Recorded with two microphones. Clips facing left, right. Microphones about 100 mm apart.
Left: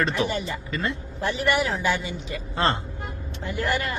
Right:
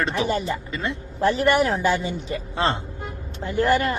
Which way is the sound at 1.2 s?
40° right (ahead or behind).